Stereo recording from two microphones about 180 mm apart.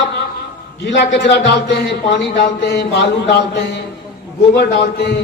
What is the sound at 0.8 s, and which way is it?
A man's voice, 70° left (ahead or behind).